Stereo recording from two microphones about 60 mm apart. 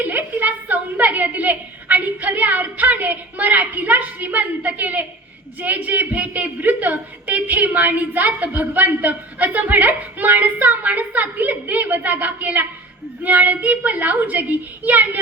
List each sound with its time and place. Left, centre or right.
0.0 s a woman's voice: right